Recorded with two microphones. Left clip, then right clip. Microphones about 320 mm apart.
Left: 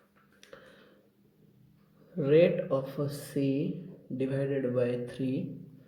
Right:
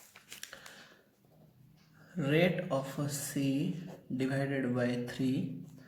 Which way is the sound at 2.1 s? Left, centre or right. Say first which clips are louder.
Left 7 dB; centre.